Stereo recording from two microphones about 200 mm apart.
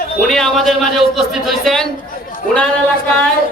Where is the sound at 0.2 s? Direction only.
Centre (ahead or behind).